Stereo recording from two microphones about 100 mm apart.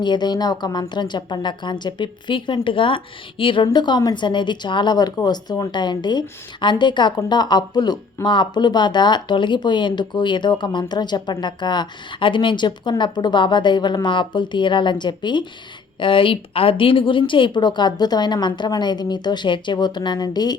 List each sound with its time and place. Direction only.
0.0 s speech: 45° left (ahead or behind)
16.0 s speech: 60° left (ahead or behind); by 20.6 s 45° left (ahead or behind)